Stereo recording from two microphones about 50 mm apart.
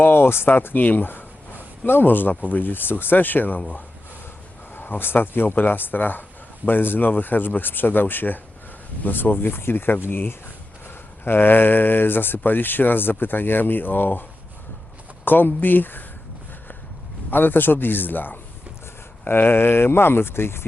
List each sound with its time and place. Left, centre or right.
0.0 s speech: left
4.7 s speech: left
17.3 s speech: left